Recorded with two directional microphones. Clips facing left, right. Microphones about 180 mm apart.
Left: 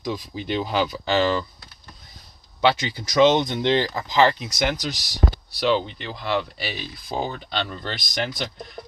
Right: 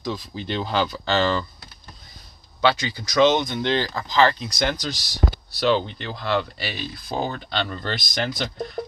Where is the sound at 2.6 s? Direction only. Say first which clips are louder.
Left 1 dB; 25° left (ahead or behind).